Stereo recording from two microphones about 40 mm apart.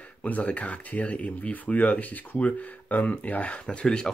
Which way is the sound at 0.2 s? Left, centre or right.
Left.